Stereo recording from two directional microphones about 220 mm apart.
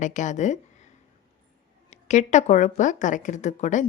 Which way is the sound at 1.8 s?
30° left (ahead or behind).